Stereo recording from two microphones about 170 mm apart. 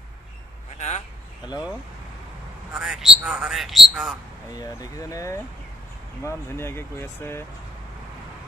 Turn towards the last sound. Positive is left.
turn(degrees=15)  # may be behind; listen again after turning